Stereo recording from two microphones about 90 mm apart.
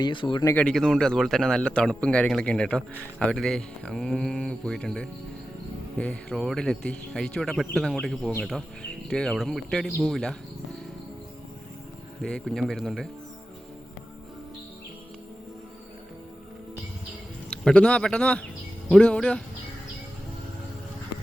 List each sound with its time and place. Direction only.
0.0 s speech: 65° left (ahead or behind)
0.5 s speech: 15° left (ahead or behind)
12.2 s speech: 5° left (ahead or behind)
17.5 s speech: 10° left (ahead or behind)